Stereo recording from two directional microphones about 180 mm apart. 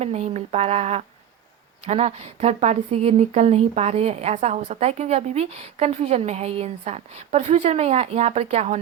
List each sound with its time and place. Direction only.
0.0 s speech: 35° right (ahead or behind)